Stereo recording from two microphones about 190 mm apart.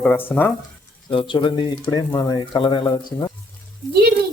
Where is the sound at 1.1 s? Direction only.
25° left (ahead or behind).